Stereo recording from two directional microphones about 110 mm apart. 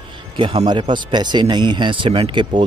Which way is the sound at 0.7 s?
45° right (ahead or behind).